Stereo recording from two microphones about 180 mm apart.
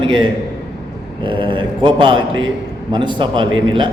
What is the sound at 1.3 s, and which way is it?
A man's voice, 25° right (ahead or behind).